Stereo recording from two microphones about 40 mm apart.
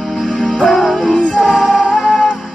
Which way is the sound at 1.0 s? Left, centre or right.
Left.